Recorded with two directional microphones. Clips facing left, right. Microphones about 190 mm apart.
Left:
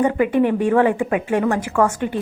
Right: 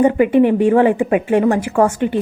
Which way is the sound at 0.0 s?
20° right (ahead or behind).